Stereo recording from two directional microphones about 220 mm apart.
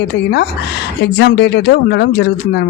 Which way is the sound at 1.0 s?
50° left (ahead or behind).